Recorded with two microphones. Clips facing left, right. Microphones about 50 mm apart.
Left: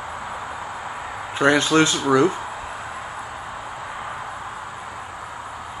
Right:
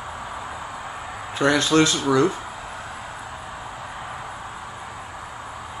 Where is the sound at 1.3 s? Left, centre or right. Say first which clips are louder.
Left 1 dB; left.